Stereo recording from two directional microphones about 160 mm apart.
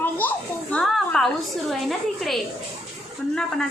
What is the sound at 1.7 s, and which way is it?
A woman's voice, centre (ahead or behind).